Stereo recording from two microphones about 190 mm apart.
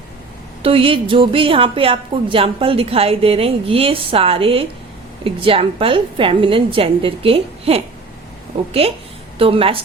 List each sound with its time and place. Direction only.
0.6 s a woman's voice: 30° right (ahead or behind)
9.4 s a woman's voice: 30° right (ahead or behind)